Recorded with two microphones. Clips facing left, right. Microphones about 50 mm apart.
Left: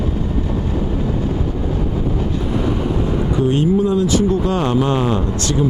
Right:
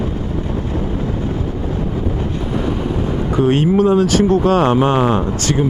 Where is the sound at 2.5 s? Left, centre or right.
Centre.